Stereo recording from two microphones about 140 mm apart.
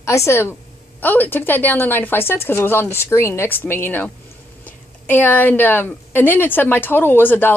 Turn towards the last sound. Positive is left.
turn(degrees=15)  # may be behind; listen again after turning